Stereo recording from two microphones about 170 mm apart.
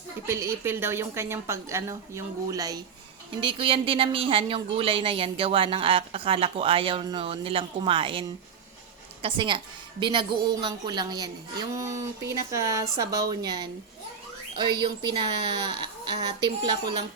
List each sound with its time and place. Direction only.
0.3 s a woman's voice: 15° right (ahead or behind); by 8.2 s 30° right (ahead or behind)
9.2 s speech: 30° right (ahead or behind)
14.5 s speech: 30° right (ahead or behind)